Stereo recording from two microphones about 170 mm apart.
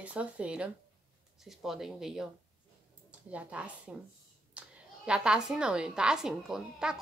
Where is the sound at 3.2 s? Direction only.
10° right (ahead or behind).